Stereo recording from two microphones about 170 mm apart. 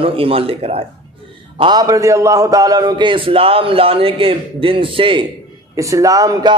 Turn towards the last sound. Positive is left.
turn(degrees=-25)  # may be behind; listen again after turning